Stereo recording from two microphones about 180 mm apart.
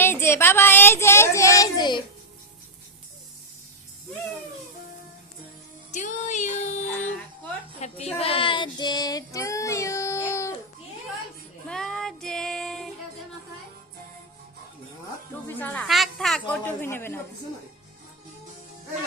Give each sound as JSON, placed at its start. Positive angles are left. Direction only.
{"t": 0.0, "sound": "child singing", "side_deg": 15}
{"t": 5.9, "sound": "music", "side_deg": 40}
{"t": 7.8, "sound": "child singing", "side_deg": 35}
{"t": 11.7, "sound": "child singing", "side_deg": 0}
{"t": 15.4, "sound": "a woman's voice", "side_deg": 10}